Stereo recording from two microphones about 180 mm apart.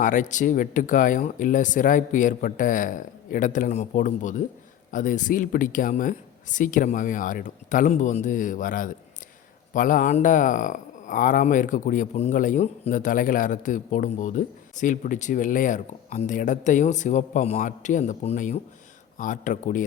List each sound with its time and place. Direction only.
0.0 s speech: 45° left (ahead or behind)